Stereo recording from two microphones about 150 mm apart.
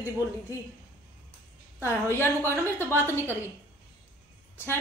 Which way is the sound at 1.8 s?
15° left (ahead or behind).